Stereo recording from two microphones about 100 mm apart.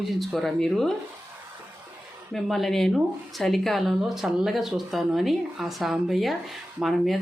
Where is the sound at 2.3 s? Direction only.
Centre (ahead or behind).